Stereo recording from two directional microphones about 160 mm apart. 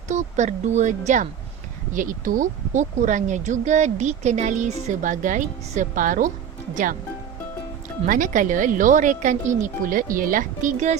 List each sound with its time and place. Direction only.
0.1 s speech: 45° right (ahead or behind)
8.0 s a woman's voice: 55° right (ahead or behind)